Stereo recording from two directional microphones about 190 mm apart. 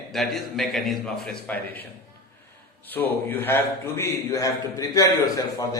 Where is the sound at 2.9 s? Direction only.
10° left (ahead or behind).